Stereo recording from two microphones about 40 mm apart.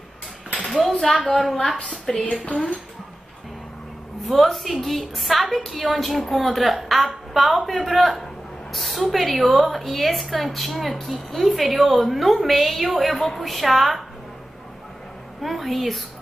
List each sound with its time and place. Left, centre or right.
0.8 s a sound: centre
1.2 s a woman's voice: centre
2.4 s speech: left
4.3 s a woman's voice: centre
15.4 s a woman's voice: centre